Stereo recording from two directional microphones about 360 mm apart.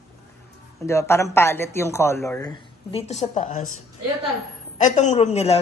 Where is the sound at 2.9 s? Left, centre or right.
Centre.